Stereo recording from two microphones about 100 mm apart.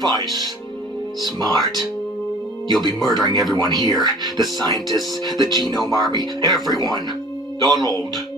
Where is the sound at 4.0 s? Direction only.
45° right (ahead or behind).